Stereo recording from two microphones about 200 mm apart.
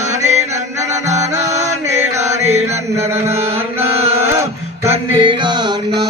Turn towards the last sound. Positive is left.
turn(degrees=-25)  # may be behind; listen again after turning